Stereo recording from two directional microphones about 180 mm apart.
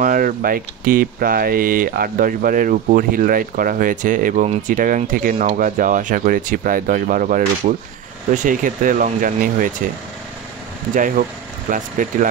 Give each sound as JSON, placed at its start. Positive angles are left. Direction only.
{"t": 0.0, "sound": "speech", "side_deg": -50}
{"t": 11.7, "sound": "speech", "side_deg": -45}